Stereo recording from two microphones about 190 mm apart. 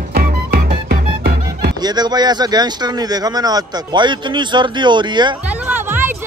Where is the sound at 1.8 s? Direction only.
20° right (ahead or behind).